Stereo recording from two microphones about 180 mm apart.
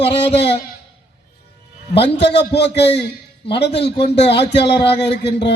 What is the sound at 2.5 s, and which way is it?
A man's voice, 70° left (ahead or behind).